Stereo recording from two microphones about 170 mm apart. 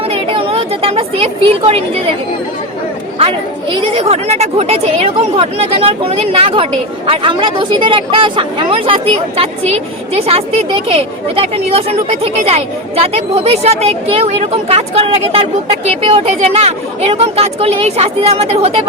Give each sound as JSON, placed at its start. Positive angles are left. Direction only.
{"t": 0.1, "sound": "a woman's voice", "side_deg": -35}
{"t": 3.2, "sound": "speech", "side_deg": -35}